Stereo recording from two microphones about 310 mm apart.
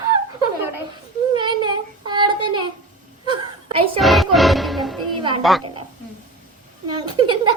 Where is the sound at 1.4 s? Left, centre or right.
Centre.